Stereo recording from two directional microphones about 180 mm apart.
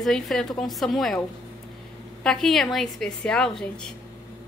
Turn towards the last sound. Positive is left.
turn(degrees=5)  # may be behind; listen again after turning